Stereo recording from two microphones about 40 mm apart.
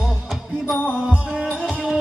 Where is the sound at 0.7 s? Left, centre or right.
Left.